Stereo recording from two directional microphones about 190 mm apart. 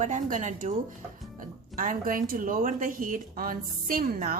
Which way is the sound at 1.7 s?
45° right (ahead or behind).